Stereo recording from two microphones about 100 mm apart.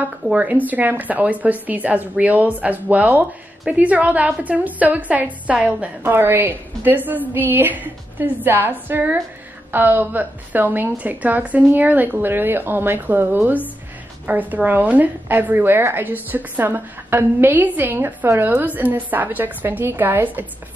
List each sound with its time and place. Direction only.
0.3 s a woman's voice: 15° right (ahead or behind)